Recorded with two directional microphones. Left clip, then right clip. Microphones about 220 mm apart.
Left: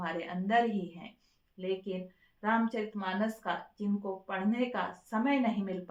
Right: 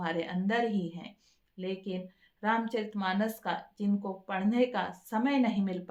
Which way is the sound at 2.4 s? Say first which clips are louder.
Right 1 dB; 50° right (ahead or behind).